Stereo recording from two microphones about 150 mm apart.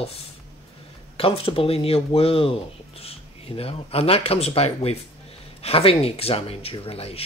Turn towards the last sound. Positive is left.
turn(degrees=40)  # may be behind; listen again after turning